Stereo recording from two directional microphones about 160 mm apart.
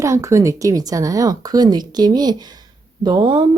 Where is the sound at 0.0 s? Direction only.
20° right (ahead or behind).